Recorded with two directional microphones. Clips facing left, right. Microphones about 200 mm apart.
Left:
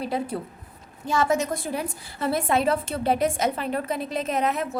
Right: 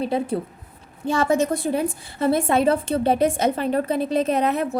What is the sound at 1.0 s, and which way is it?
A woman's voice, 30° right (ahead or behind).